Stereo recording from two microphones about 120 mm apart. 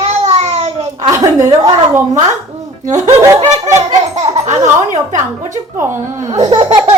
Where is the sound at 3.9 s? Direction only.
65° right (ahead or behind).